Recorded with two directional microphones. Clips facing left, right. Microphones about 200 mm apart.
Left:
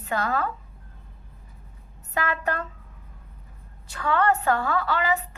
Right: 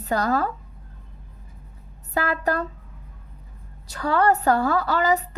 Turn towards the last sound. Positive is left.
turn(degrees=-40)  # may be behind; listen again after turning